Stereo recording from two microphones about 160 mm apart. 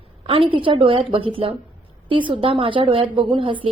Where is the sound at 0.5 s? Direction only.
30° right (ahead or behind).